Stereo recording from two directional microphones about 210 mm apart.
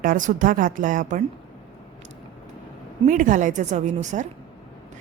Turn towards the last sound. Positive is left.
turn(degrees=-35)  # may be behind; listen again after turning